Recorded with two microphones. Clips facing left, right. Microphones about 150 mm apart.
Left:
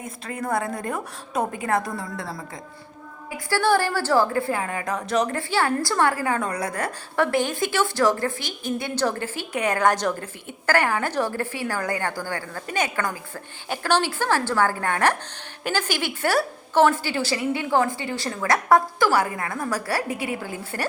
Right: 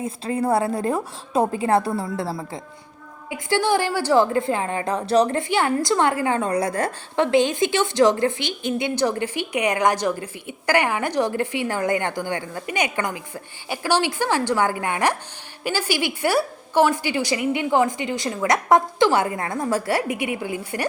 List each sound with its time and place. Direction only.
0.0 s a woman's voice: 30° right (ahead or behind)
5.4 s a woman's voice: 20° right (ahead or behind)